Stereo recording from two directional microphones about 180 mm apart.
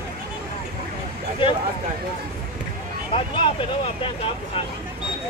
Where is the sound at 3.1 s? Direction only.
35° left (ahead or behind).